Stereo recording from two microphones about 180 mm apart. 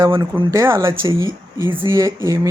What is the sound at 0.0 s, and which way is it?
Speech, 20° right (ahead or behind).